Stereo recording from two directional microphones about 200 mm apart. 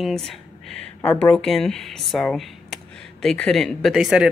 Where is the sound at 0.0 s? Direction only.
Centre (ahead or behind).